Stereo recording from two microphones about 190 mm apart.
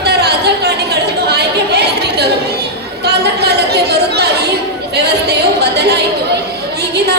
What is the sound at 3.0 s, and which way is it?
Chatter, 60° right (ahead or behind).